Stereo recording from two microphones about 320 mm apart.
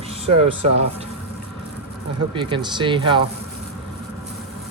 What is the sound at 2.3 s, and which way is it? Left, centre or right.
Speech, centre.